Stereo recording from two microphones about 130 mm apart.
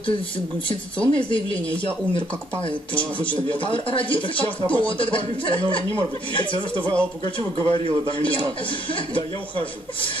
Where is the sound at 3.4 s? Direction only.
40° left (ahead or behind).